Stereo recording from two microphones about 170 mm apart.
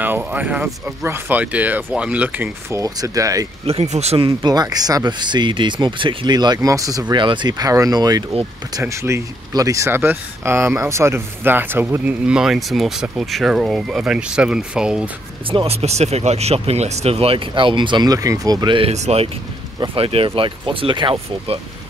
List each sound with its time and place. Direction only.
0.0 s speech: 10° right (ahead or behind)
3.6 s speech: 40° right (ahead or behind)
4.4 s speech: 25° right (ahead or behind); by 15.0 s 5° right (ahead or behind)
15.5 s speech: 35° right (ahead or behind)